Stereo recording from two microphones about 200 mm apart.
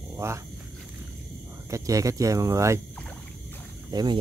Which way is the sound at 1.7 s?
15° right (ahead or behind).